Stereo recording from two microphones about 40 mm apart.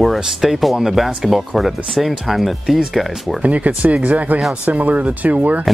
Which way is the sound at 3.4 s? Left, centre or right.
Right.